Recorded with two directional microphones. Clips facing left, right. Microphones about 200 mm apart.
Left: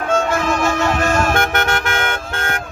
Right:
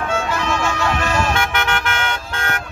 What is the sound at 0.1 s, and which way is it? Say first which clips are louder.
Music: left 6 dB; 45° left (ahead or behind).